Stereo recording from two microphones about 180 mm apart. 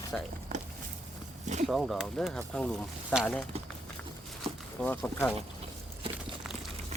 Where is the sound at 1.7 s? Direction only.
Centre (ahead or behind).